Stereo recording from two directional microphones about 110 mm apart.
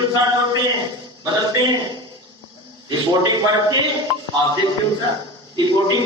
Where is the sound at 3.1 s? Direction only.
40° right (ahead or behind).